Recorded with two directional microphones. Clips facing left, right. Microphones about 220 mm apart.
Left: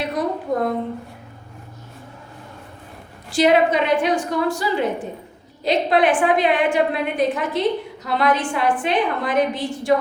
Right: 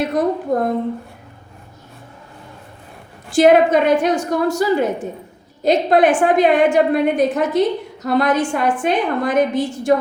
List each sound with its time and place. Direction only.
0.2 s a woman's voice: 50° right (ahead or behind)
3.2 s a woman's voice: 50° right (ahead or behind)